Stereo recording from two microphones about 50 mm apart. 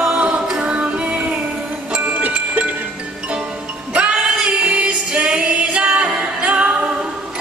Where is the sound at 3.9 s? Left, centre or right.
Right.